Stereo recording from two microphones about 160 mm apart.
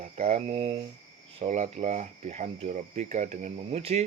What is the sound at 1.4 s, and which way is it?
Speech, 45° right (ahead or behind).